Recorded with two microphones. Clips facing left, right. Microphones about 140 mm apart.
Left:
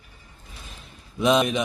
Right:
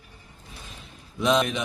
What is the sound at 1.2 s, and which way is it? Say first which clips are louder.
Speech: left 3 dB; 10° left (ahead or behind).